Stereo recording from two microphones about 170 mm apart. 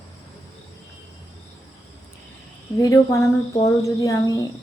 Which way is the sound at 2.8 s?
20° left (ahead or behind).